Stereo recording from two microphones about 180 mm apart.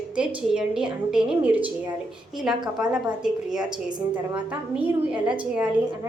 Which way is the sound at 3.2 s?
5° right (ahead or behind).